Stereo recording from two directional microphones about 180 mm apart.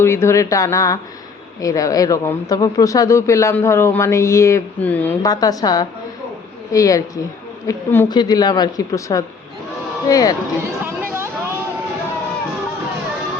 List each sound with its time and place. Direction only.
0.0 s a man's voice: 15° left (ahead or behind)
5.2 s a man's voice: 20° left (ahead or behind)
8.1 s speech: 25° left (ahead or behind)
10.8 s a sound: 15° right (ahead or behind)